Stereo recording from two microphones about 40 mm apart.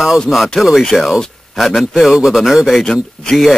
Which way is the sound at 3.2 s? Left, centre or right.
Left.